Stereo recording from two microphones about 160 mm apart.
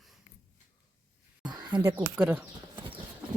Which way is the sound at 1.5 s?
30° right (ahead or behind).